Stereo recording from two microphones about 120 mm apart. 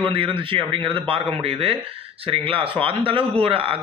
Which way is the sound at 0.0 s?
45° right (ahead or behind).